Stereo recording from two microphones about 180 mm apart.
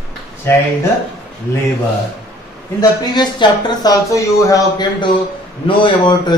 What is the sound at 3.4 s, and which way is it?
Speech, 25° left (ahead or behind).